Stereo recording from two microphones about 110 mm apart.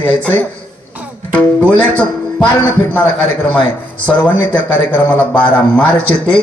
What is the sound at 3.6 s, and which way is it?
Speech, 45° left (ahead or behind).